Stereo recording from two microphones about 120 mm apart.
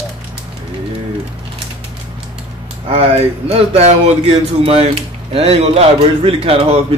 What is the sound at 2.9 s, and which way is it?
Speech, 55° right (ahead or behind).